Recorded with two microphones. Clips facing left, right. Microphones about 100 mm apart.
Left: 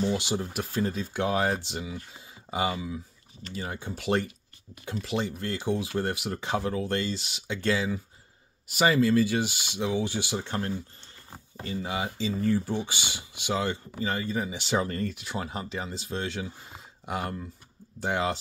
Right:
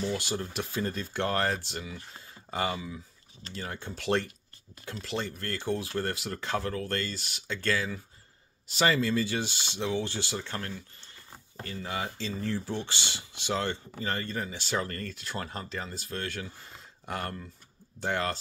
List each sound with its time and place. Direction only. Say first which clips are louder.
0.1 s speech: left 3 dB; 15° left (ahead or behind)
10.4 s speech: left 6 dB; 25° left (ahead or behind)